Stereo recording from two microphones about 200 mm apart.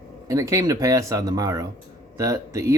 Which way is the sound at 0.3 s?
15° right (ahead or behind).